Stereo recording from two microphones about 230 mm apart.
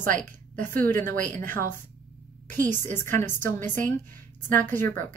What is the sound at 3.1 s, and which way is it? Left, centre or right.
A woman's voice, centre.